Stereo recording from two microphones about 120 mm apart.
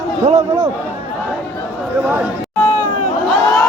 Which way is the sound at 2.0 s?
10° right (ahead or behind).